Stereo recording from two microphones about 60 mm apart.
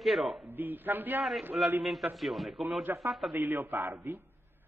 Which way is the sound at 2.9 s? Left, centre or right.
Right.